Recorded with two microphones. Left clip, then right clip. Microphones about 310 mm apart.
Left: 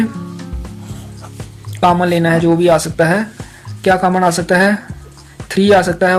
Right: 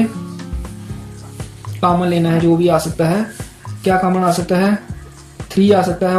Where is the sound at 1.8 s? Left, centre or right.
Left.